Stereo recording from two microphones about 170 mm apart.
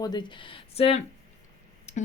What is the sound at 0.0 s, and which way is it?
Speech, 25° left (ahead or behind).